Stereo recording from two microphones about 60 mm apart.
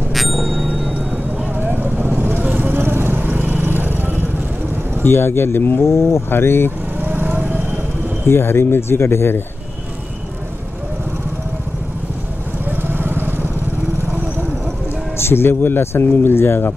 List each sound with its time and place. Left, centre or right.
0.1 s music: centre
1.6 s vehicle: right
2.4 s vehicle: right
2.7 s vehicle: right
5.0 s speech: left
7.0 s vehicle: right
8.3 s speech: left
12.6 s vehicle: right
15.1 s speech: left